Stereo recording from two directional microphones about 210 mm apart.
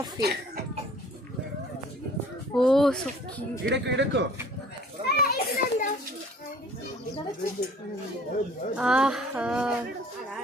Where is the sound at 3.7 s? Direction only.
55° right (ahead or behind).